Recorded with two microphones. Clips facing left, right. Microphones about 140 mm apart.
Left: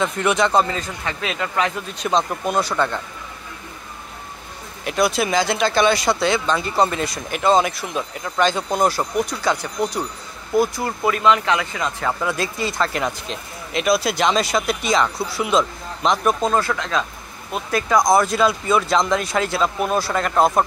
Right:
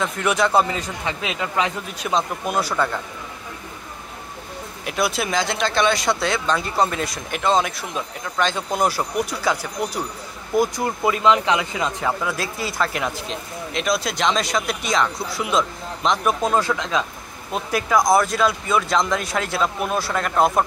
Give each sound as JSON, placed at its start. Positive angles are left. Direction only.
{"t": 0.0, "sound": "speech", "side_deg": 0}
{"t": 4.8, "sound": "speech", "side_deg": 0}
{"t": 10.5, "sound": "speech", "side_deg": -15}
{"t": 12.1, "sound": "speech", "side_deg": 0}
{"t": 16.4, "sound": "speech", "side_deg": -15}